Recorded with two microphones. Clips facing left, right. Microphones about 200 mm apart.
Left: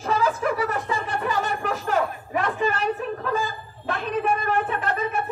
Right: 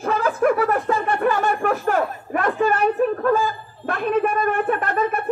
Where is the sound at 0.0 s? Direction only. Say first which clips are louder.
Right 4 dB; 55° right (ahead or behind).